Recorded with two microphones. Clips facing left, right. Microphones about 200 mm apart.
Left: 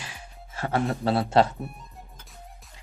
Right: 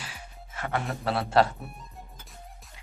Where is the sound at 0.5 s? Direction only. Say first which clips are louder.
Left 5 dB; 35° left (ahead or behind).